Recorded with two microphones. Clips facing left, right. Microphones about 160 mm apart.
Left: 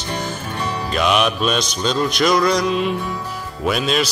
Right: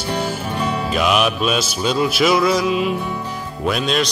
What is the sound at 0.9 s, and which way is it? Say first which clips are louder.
Music: left 1 dB; 5° right (ahead or behind).